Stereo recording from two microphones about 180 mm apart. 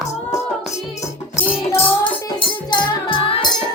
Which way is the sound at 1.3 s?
30° left (ahead or behind).